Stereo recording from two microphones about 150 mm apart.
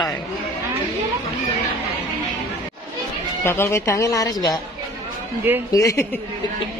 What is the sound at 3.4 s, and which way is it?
A woman's voice, 15° left (ahead or behind).